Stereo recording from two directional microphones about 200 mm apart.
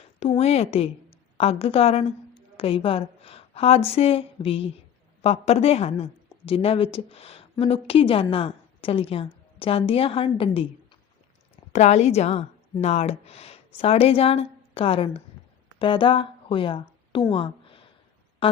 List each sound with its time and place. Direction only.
0.2 s a woman's voice: 30° left (ahead or behind)
11.7 s a woman's voice: 35° left (ahead or behind)